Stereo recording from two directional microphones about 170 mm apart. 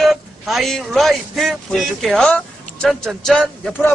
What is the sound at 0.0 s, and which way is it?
Speech, centre (ahead or behind).